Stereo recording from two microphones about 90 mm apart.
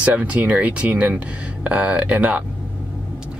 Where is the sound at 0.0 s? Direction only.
15° right (ahead or behind).